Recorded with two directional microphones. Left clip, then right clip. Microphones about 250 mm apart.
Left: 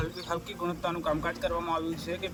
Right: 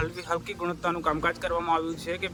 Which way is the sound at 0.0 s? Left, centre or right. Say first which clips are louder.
Right 4 dB; centre.